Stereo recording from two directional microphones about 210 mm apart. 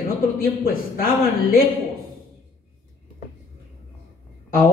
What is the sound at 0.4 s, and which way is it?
Speech, 45° left (ahead or behind).